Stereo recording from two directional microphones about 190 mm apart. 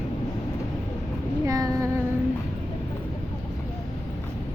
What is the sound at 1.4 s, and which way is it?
Speech, 15° right (ahead or behind).